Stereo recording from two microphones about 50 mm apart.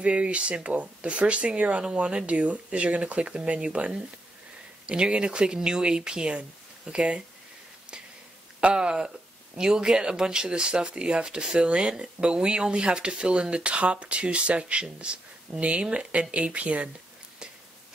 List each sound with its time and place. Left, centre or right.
0.0 s speech: right
8.5 s speech: centre